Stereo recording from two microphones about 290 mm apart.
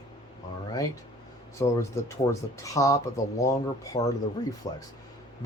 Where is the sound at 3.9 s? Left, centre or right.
Left.